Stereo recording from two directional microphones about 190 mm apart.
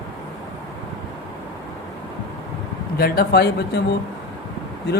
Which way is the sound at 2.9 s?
55° left (ahead or behind).